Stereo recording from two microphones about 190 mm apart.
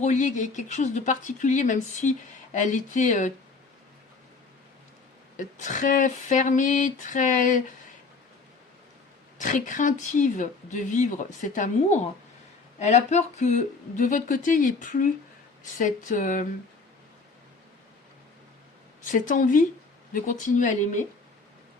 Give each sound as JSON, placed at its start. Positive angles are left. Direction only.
{"t": 0.0, "sound": "speech", "side_deg": 40}
{"t": 5.4, "sound": "speech", "side_deg": 40}
{"t": 9.4, "sound": "speech", "side_deg": 45}
{"t": 19.1, "sound": "speech", "side_deg": 40}